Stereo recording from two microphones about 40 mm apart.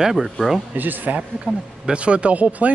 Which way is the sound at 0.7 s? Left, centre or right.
Right.